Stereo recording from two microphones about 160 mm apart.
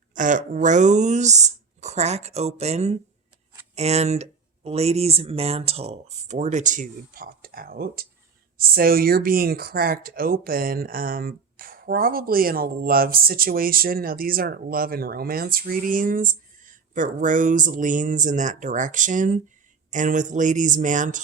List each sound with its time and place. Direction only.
0.1 s speech: 55° right (ahead or behind)